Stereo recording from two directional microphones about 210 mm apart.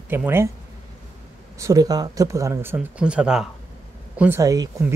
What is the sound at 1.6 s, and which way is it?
Speech, 15° right (ahead or behind).